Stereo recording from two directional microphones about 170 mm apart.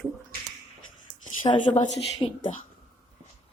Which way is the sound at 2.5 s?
40° left (ahead or behind).